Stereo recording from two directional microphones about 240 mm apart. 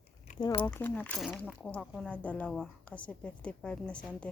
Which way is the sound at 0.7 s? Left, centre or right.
Centre.